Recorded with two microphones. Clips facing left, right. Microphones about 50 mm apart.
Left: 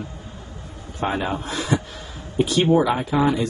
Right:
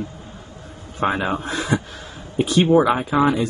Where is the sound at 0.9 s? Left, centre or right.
Right.